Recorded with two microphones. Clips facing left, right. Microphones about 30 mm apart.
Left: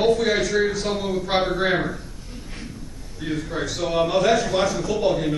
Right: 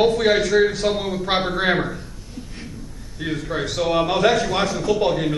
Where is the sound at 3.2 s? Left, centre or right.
Right.